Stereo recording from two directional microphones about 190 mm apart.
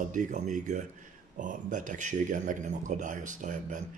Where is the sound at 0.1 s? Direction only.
40° right (ahead or behind).